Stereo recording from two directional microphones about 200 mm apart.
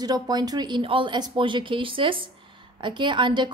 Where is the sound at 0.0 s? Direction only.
20° right (ahead or behind).